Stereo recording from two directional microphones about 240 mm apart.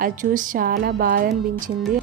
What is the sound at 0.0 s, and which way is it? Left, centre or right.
A woman's voice, right.